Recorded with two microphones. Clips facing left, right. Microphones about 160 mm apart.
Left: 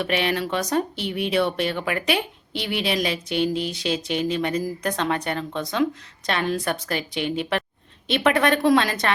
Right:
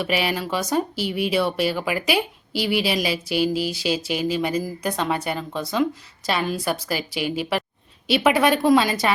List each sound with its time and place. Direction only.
0.0 s speech: 5° right (ahead or behind)